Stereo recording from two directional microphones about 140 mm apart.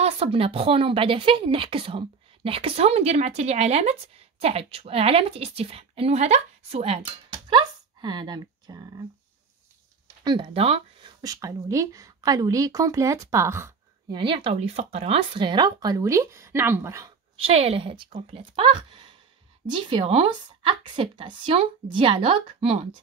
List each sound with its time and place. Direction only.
0.0 s a woman's voice: 45° right (ahead or behind)
7.4 s speech: 35° right (ahead or behind)
10.4 s a woman's voice: 45° right (ahead or behind)
11.1 s speech: 25° right (ahead or behind)
14.0 s a woman's voice: 35° right (ahead or behind); by 17.1 s 20° right (ahead or behind)
17.4 s a woman's voice: 45° right (ahead or behind)